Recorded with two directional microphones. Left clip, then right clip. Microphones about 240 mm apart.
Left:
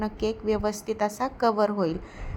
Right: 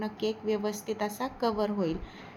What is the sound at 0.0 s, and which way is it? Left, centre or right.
A woman's voice, left.